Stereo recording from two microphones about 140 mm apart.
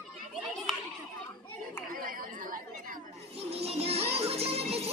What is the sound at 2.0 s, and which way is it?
Chatter, 80° right.